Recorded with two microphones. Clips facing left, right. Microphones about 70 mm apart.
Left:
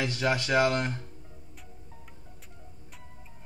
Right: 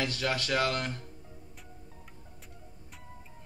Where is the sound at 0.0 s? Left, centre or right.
Left.